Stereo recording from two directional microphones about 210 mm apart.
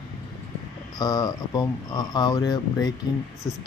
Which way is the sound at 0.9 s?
20° left (ahead or behind).